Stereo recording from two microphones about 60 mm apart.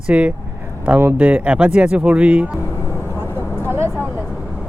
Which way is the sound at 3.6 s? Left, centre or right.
Right.